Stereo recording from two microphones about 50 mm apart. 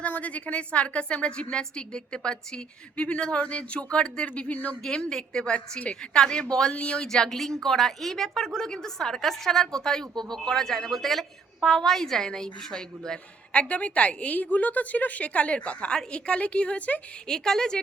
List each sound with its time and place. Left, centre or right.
0.0 s a woman's voice: left
4.5 s speech: left
4.8 s a woman's voice: centre
13.5 s a woman's voice: left
17.2 s a woman's voice: centre